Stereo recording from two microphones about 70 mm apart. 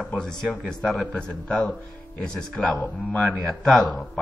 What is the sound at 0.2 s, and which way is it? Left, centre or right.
Speech, centre.